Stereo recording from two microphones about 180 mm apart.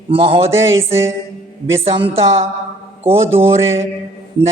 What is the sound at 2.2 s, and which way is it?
Speech, 35° right (ahead or behind).